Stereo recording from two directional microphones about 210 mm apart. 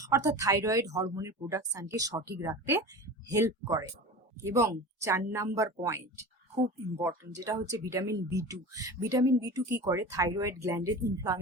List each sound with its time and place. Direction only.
0.1 s speech: 15° right (ahead or behind)